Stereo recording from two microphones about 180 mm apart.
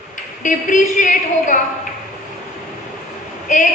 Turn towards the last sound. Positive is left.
turn(degrees=45)  # may be behind; listen again after turning